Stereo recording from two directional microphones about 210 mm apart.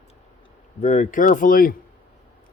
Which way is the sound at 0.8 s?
35° left (ahead or behind).